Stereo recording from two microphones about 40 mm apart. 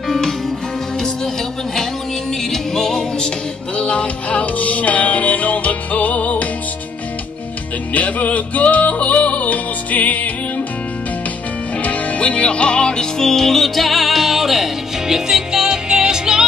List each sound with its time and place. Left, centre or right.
2.5 s music: centre
3.7 s music: left
7.9 s music: left
11.8 s music: left; by 16.4 s centre